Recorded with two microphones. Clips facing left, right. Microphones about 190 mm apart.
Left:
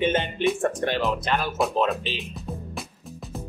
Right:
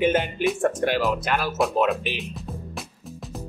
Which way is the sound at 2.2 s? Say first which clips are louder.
Even; centre (ahead or behind).